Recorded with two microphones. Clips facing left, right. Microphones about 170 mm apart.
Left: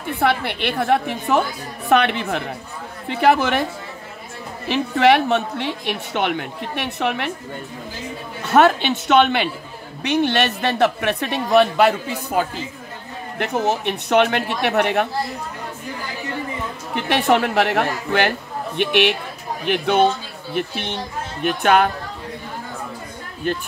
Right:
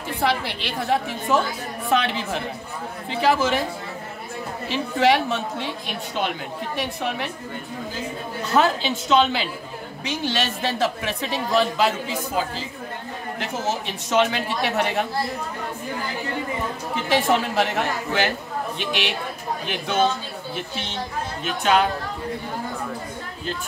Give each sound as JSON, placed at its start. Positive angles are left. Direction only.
{"t": 0.0, "sound": "a woman's voice", "side_deg": 60}
{"t": 4.6, "sound": "a woman's voice", "side_deg": 65}
{"t": 8.5, "sound": "a woman's voice", "side_deg": 65}
{"t": 16.9, "sound": "a woman's voice", "side_deg": 65}